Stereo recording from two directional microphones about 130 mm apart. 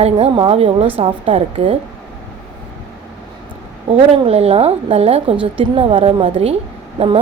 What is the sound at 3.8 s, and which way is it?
A woman's voice, 50° right (ahead or behind).